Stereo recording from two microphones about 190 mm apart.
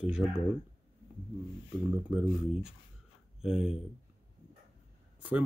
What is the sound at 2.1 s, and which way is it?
Speech, 5° right (ahead or behind).